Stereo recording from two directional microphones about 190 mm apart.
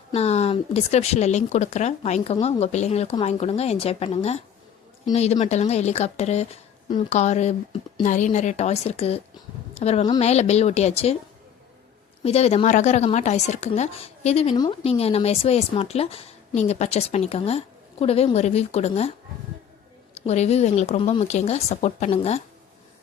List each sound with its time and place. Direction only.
0.1 s a woman's voice: 35° left (ahead or behind)
12.2 s speech: 35° left (ahead or behind)
14.5 s speech: 20° left (ahead or behind)
14.8 s speech: 30° left (ahead or behind)
20.1 s speech: 35° left (ahead or behind)